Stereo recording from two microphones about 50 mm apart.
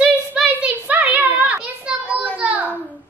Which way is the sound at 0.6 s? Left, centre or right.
Right.